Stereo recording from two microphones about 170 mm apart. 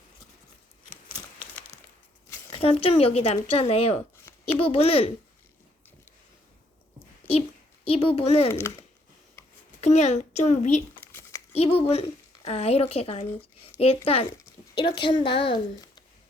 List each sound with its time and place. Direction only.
2.3 s speech: 30° left (ahead or behind)
7.2 s a sound: 15° left (ahead or behind)
7.9 s speech: 35° left (ahead or behind)
9.8 s a child's voice: 40° left (ahead or behind)
11.1 s a sound: 15° left (ahead or behind)
11.5 s a woman's voice: 35° left (ahead or behind)